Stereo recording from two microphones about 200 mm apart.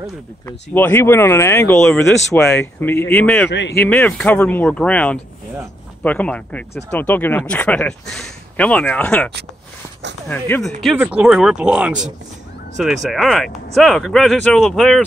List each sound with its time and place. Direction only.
0.5 s speech: 10° left (ahead or behind)
3.4 s a man's voice: 60° left (ahead or behind)
3.9 s speech: 10° left (ahead or behind)